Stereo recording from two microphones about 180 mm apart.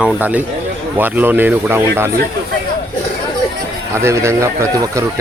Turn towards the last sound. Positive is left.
turn(degrees=-15)  # may be behind; listen again after turning